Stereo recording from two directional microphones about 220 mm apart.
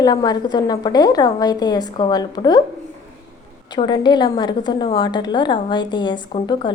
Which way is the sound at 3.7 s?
20° left (ahead or behind).